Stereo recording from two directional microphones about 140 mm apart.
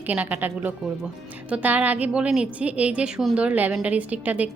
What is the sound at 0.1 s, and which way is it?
A woman's voice, 10° right (ahead or behind).